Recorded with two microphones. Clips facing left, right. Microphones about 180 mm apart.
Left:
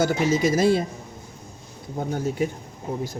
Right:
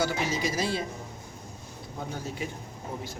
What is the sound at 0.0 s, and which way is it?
Speech, 45° left (ahead or behind).